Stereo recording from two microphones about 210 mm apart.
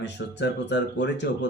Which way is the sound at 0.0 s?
55° left (ahead or behind).